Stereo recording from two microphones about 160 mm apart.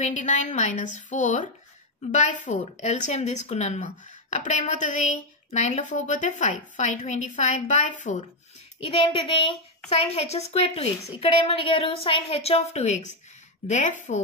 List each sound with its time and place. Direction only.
0.0 s a woman's voice: 50° left (ahead or behind)
8.7 s a woman's voice: 40° left (ahead or behind)